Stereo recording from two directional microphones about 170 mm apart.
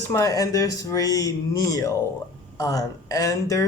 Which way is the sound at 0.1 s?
20° left (ahead or behind).